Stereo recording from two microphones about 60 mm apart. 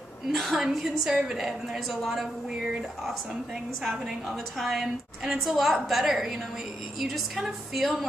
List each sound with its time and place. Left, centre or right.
0.3 s a woman's voice: centre